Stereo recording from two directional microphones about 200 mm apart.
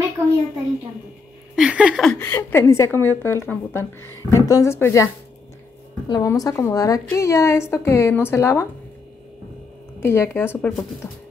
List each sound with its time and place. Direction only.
1.5 s a woman's voice: 5° right (ahead or behind); by 8.6 s 15° left (ahead or behind)
9.9 s a woman's voice: 10° left (ahead or behind)